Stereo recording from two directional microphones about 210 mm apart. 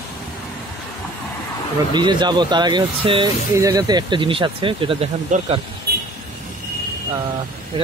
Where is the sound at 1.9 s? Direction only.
20° right (ahead or behind).